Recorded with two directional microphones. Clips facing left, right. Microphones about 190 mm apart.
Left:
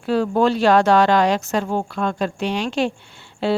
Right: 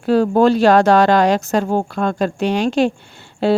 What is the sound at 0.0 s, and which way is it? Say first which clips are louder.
Speech: right 5 dB; 40° right (ahead or behind).